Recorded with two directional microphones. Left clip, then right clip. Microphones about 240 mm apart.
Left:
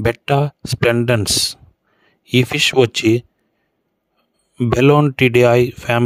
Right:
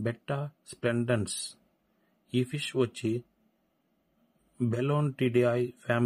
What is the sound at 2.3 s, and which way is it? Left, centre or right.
Speech, left.